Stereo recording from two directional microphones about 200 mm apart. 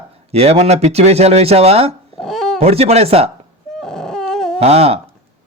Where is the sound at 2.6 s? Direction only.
30° right (ahead or behind).